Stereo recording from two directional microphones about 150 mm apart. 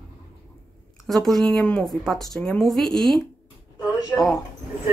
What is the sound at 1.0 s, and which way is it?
Speech, centre (ahead or behind).